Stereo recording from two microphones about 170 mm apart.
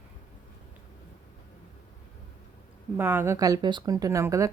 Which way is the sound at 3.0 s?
15° right (ahead or behind).